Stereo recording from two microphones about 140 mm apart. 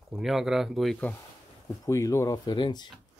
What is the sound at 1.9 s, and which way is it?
Speech, 25° left (ahead or behind).